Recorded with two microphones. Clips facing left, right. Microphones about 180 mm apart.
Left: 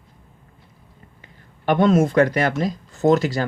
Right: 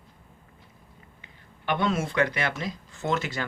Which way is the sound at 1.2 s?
45° left (ahead or behind).